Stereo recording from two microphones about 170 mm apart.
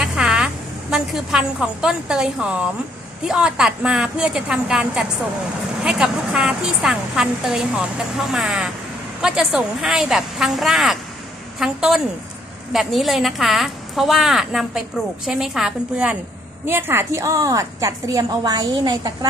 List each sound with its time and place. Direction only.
0.0 s a woman's voice: 5° right (ahead or behind); by 19.1 s 20° right (ahead or behind)